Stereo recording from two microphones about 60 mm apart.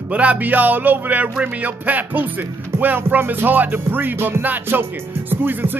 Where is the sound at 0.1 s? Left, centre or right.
Right.